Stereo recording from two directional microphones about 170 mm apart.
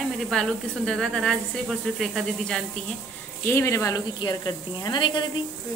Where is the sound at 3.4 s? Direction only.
15° left (ahead or behind).